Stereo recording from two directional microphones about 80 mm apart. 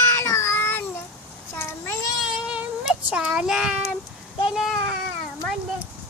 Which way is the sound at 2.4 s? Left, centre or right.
Centre.